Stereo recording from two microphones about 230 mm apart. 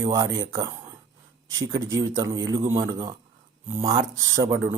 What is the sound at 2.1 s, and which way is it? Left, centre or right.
Speech, centre.